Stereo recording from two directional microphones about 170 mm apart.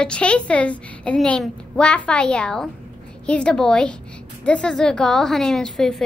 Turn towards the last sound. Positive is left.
turn(degrees=5)  # may be behind; listen again after turning